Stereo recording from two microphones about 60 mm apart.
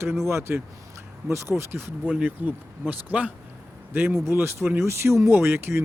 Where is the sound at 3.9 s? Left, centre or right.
Right.